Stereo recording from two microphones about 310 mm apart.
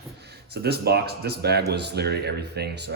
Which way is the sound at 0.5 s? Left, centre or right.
Right.